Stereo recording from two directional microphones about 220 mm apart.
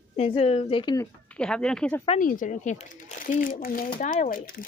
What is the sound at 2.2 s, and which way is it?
Speech, 35° left (ahead or behind).